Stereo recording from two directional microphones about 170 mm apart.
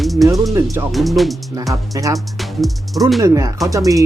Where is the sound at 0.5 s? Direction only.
15° right (ahead or behind).